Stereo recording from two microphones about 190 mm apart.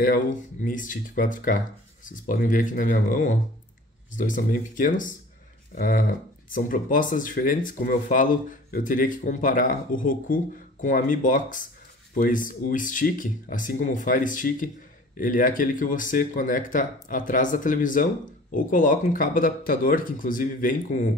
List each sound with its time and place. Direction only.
0.0 s speech: 45° left (ahead or behind)